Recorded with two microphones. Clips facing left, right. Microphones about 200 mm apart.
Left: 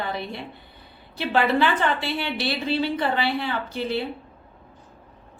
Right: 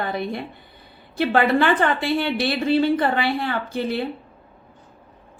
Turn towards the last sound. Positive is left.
turn(degrees=-50)  # may be behind; listen again after turning